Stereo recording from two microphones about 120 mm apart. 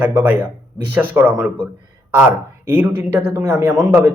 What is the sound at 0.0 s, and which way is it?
Speech, 15° right (ahead or behind).